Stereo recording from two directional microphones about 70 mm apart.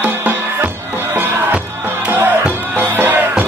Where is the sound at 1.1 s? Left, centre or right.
Right.